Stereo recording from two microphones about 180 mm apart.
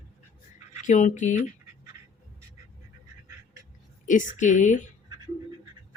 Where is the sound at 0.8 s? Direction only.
45° left (ahead or behind).